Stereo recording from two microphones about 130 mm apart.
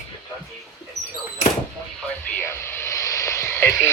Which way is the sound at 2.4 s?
20° left (ahead or behind).